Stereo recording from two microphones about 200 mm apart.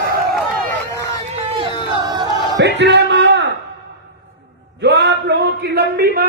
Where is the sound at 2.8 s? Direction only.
60° right (ahead or behind).